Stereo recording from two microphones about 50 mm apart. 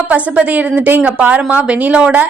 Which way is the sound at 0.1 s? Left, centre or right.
Right.